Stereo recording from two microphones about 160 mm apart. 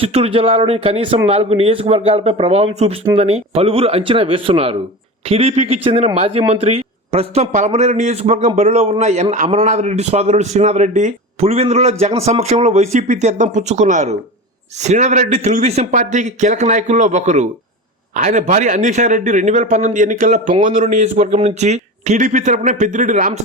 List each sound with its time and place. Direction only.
0.0 s a man's voice: 40° right (ahead or behind)